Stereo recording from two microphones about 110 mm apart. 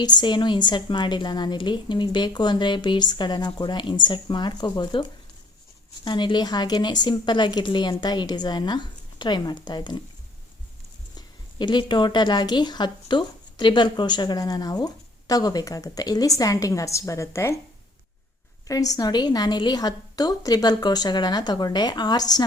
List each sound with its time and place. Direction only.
0.0 s a woman's voice: 40° left (ahead or behind)
6.1 s speech: 45° left (ahead or behind)
11.6 s speech: 45° left (ahead or behind); by 17.6 s 25° left (ahead or behind)
18.7 s speech: 35° left (ahead or behind)